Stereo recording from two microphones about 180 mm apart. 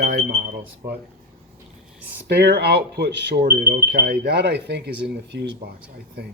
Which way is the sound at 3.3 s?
50° right (ahead or behind).